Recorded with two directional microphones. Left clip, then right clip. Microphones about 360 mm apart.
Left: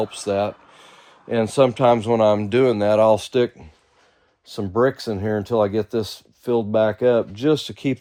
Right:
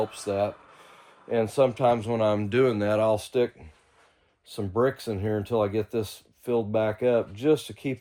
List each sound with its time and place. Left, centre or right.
0.1 s speech: left
4.7 s speech: centre